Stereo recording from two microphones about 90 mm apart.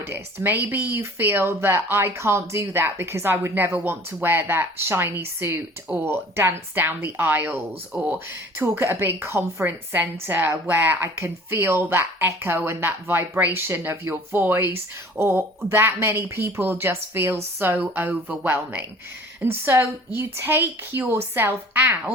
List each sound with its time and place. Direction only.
0.0 s speech: 25° right (ahead or behind)
8.6 s speech: 30° right (ahead or behind)